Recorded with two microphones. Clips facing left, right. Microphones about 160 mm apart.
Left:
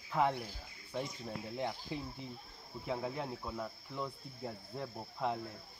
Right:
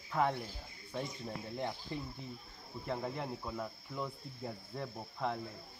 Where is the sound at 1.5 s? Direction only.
5° left (ahead or behind).